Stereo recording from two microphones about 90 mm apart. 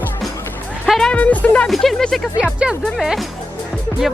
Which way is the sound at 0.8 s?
Centre (ahead or behind).